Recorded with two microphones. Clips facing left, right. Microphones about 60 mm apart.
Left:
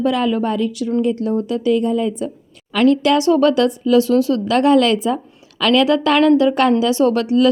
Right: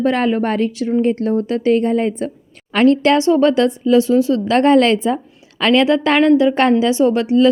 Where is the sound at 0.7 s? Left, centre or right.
Right.